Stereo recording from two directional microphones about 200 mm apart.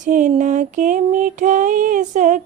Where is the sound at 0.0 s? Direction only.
40° right (ahead or behind).